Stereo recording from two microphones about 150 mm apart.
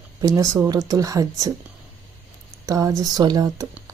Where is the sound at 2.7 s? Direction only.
25° right (ahead or behind).